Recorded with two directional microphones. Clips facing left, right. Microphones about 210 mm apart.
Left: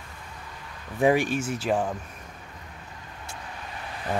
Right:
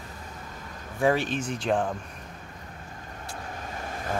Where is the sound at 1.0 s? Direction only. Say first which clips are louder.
Left 3 dB; 15° left (ahead or behind).